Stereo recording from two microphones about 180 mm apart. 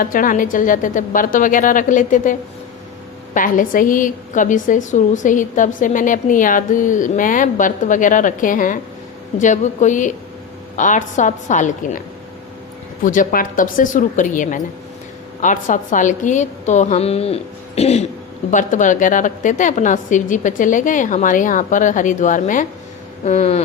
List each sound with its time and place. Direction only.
0.0 s a woman's voice: 50° left (ahead or behind)
3.3 s a woman's voice: 50° left (ahead or behind)